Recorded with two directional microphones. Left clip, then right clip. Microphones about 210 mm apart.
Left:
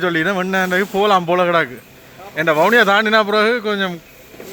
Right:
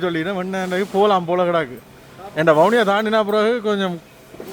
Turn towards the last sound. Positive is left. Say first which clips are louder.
# left 2 dB
turn(degrees=-10)  # may be behind; listen again after turning